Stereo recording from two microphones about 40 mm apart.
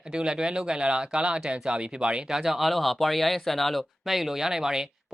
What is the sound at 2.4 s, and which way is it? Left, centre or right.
Speech, centre.